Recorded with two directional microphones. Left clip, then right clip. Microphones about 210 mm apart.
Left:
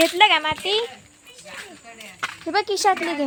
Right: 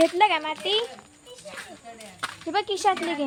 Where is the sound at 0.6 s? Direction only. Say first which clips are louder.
Left 2 dB; 45° left (ahead or behind).